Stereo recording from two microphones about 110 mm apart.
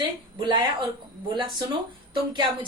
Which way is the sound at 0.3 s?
45° right (ahead or behind).